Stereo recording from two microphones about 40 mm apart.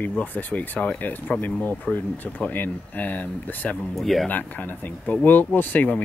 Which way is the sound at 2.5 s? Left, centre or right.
Left.